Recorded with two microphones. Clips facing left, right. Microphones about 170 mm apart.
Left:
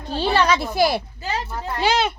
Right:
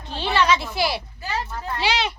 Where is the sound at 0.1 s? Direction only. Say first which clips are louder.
Left 2 dB; 40° left (ahead or behind).